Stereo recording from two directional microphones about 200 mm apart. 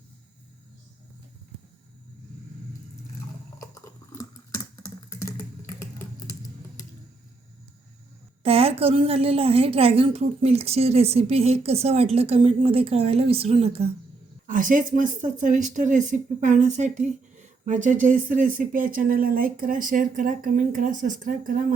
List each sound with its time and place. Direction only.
3.6 s a sound: 15° left (ahead or behind)
8.4 s a woman's voice: 30° right (ahead or behind)
14.4 s speech: 40° right (ahead or behind)